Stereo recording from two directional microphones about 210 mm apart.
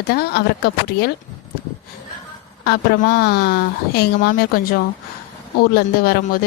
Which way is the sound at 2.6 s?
50° left (ahead or behind).